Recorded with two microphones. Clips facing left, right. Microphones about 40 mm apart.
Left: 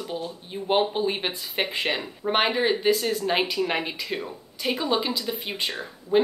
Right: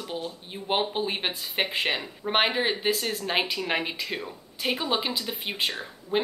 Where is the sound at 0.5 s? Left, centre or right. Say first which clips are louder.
Left 4 dB; centre.